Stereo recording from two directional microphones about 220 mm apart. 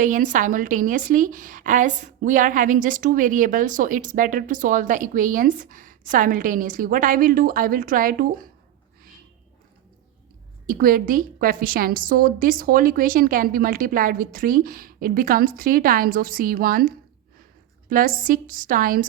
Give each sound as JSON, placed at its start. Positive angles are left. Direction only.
{"t": 0.0, "sound": "a woman's voice", "side_deg": -35}
{"t": 10.7, "sound": "a woman's voice", "side_deg": -40}